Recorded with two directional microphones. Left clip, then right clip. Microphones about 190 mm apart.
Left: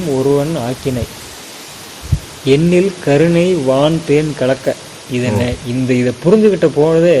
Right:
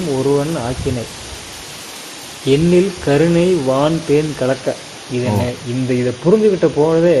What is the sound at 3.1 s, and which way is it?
Speech, 30° left (ahead or behind).